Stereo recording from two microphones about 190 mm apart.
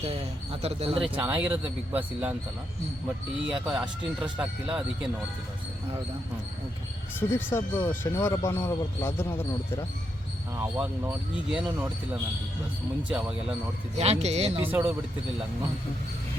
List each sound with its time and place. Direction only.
0.0 s speech: 30° right (ahead or behind)
1.2 s speech: 10° right (ahead or behind)
3.4 s speech: 5° right (ahead or behind)
7.2 s speech: 10° left (ahead or behind)
11.0 s speech: 10° right (ahead or behind)
13.1 s speech: 5° right (ahead or behind)
13.9 s speech: 35° right (ahead or behind)
14.6 s speech: 10° right (ahead or behind)